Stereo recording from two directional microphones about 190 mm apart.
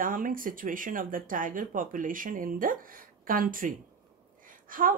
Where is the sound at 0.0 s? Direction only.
45° right (ahead or behind).